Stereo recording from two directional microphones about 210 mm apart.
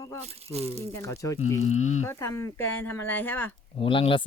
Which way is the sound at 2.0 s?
15° left (ahead or behind).